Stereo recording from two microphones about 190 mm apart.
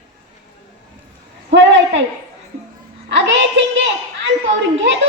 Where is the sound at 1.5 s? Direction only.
70° right (ahead or behind).